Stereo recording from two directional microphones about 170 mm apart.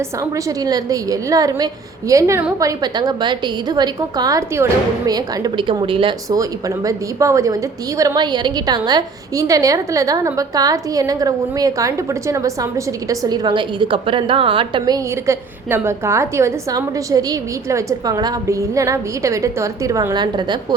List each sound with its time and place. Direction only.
0.3 s a woman's voice: 20° right (ahead or behind)